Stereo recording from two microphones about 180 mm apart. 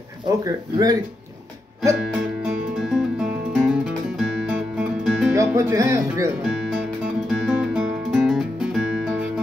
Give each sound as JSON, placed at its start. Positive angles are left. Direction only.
{"t": 0.4, "sound": "speech", "side_deg": -20}
{"t": 2.0, "sound": "music", "side_deg": -5}
{"t": 5.3, "sound": "speech", "side_deg": -15}
{"t": 7.2, "sound": "music", "side_deg": 0}